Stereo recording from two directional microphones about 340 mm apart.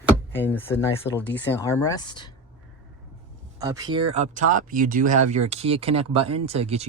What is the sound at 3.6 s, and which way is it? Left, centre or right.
Speech, centre.